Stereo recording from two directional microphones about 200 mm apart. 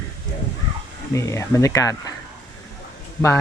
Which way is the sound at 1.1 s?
15° left (ahead or behind).